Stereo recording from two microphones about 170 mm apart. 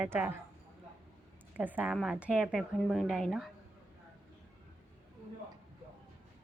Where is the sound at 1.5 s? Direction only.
10° right (ahead or behind).